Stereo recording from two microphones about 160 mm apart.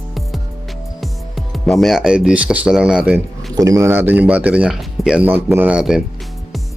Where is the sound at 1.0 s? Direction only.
Centre (ahead or behind).